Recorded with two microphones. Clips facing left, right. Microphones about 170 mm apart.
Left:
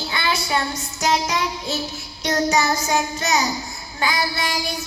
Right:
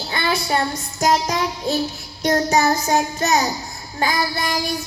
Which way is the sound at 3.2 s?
50° right (ahead or behind).